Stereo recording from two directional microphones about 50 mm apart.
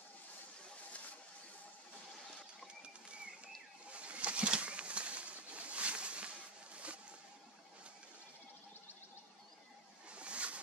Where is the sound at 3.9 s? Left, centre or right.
Right.